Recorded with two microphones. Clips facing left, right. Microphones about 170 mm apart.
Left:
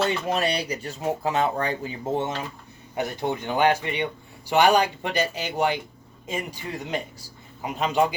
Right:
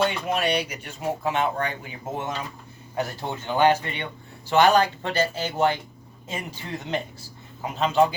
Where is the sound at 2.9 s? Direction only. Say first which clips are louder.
Left 2 dB; 15° left (ahead or behind).